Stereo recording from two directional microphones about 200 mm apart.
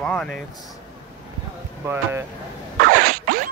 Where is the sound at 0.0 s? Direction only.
5° left (ahead or behind).